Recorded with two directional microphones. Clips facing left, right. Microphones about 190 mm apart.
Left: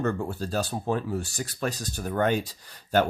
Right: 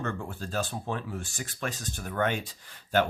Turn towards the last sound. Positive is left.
turn(degrees=40)  # may be behind; listen again after turning